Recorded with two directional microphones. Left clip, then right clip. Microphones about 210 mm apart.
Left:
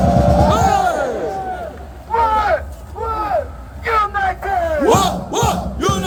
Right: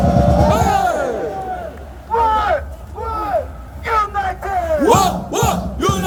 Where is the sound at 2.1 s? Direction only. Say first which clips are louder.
Even; centre (ahead or behind).